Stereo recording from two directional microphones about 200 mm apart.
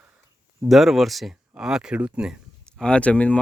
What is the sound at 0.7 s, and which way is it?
Speech, centre (ahead or behind).